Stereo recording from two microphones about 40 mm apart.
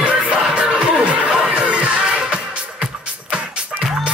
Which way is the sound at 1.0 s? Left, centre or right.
Right.